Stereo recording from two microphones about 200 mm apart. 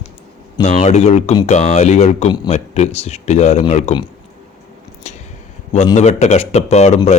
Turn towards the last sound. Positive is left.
turn(degrees=35)  # may be behind; listen again after turning